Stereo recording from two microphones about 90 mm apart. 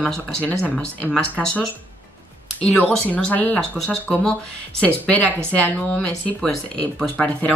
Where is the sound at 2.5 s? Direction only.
15° left (ahead or behind).